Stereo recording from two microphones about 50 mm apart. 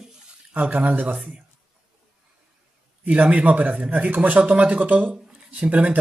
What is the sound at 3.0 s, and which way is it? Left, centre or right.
Speech, right.